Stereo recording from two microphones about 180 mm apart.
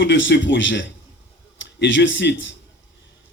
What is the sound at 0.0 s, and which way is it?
A man's voice, 80° left.